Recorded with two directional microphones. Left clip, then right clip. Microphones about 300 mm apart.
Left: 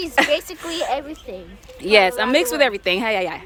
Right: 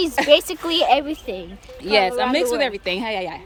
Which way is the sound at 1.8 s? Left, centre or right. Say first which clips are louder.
Left 3 dB; centre.